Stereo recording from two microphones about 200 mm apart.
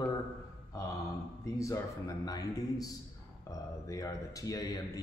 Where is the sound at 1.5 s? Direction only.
15° left (ahead or behind).